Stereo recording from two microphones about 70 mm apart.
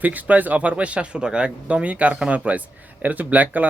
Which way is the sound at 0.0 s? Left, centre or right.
Right.